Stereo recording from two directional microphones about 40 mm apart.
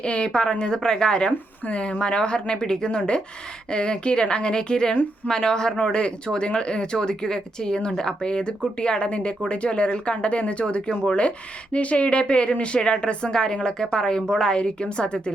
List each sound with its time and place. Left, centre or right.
0.0 s speech: left
0.6 s speech: centre
1.6 s speech: left